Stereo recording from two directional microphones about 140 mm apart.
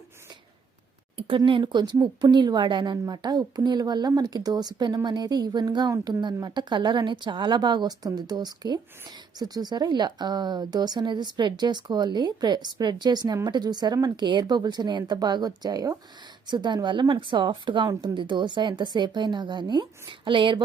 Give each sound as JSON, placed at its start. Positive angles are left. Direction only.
{"t": 1.5, "sound": "a woman's voice", "side_deg": -35}